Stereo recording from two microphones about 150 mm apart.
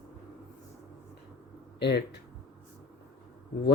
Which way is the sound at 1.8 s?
90° left.